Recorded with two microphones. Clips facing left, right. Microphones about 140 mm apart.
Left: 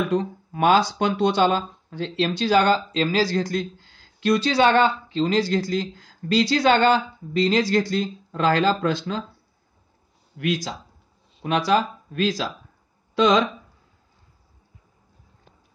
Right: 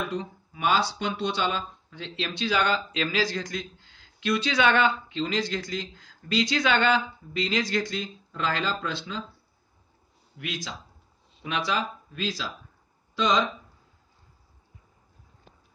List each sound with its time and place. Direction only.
0.1 s speech: 50° left (ahead or behind)
10.3 s speech: 45° left (ahead or behind)
13.1 s speech: 60° left (ahead or behind)